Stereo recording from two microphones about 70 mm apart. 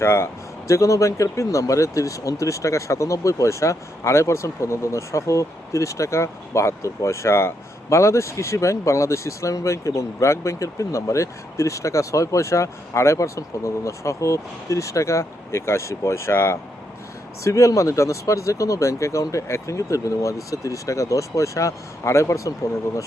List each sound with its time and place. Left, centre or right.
0.0 s speech: left
0.7 s speech: left
17.4 s speech: left